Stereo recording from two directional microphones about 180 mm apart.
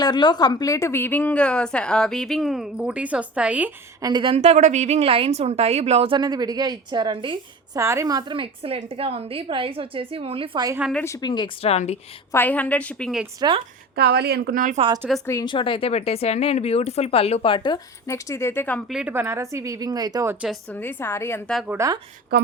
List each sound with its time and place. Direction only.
0.0 s a woman's voice: 25° left (ahead or behind); by 3.7 s 5° right (ahead or behind)
4.0 s a woman's voice: 25° right (ahead or behind)
7.8 s a woman's voice: 15° right (ahead or behind)
11.0 s speech: 20° left (ahead or behind); by 11.9 s 35° left (ahead or behind)
12.3 s a woman's voice: 10° left (ahead or behind)
13.9 s a woman's voice: 65° right (ahead or behind)
15.3 s speech: 20° left (ahead or behind)
18.9 s speech: 5° right (ahead or behind)
20.7 s a woman's voice: 10° left (ahead or behind)
21.7 s speech: 15° right (ahead or behind)